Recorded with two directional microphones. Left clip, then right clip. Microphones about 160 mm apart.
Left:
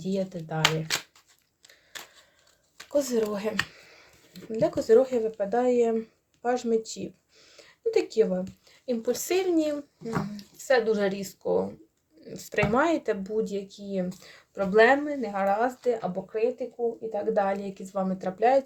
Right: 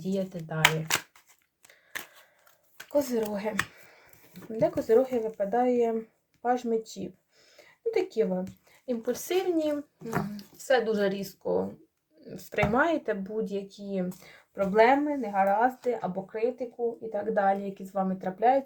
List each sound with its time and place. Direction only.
0.0 s a child's voice: 10° left (ahead or behind)
3.1 s a child's voice: 20° left (ahead or behind)
14.2 s a child's voice: 25° left (ahead or behind)